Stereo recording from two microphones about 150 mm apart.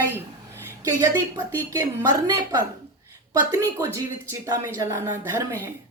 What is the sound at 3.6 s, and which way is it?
A woman's voice, 20° right (ahead or behind).